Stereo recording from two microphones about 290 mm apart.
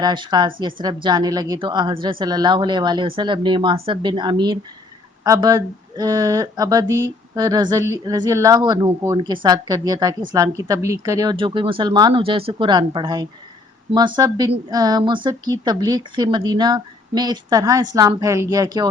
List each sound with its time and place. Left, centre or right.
0.0 s speech: centre